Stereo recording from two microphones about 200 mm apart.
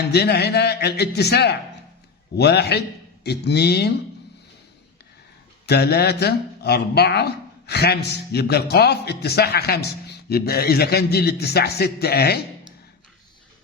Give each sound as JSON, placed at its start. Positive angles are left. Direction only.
{"t": 0.1, "sound": "a man's voice", "side_deg": 55}
{"t": 5.6, "sound": "a man's voice", "side_deg": 55}